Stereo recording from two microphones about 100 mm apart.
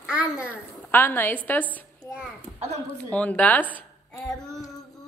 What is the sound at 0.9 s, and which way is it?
Child singing, 20° left (ahead or behind).